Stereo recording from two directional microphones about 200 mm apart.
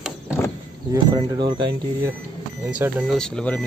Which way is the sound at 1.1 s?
20° right (ahead or behind).